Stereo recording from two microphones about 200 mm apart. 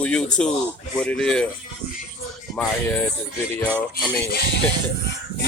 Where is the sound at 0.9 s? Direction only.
5° left (ahead or behind).